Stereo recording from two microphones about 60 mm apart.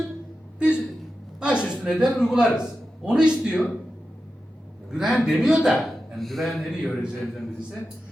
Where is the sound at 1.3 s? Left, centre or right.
Centre.